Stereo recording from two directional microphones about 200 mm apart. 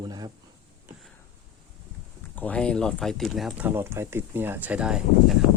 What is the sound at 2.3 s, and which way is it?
Speech, 5° left (ahead or behind).